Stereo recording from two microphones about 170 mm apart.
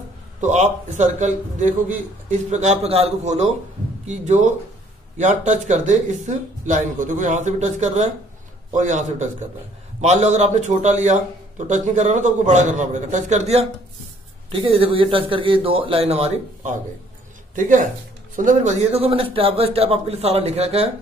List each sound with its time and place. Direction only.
0.4 s a man's voice: 45° right (ahead or behind)